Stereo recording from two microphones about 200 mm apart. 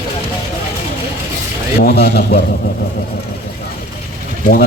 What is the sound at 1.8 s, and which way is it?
Speech, 50° left (ahead or behind).